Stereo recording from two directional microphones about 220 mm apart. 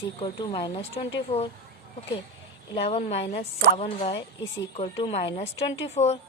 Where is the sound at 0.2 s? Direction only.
20° left (ahead or behind).